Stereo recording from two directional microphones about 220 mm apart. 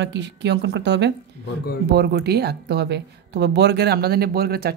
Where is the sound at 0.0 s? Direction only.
50° right (ahead or behind).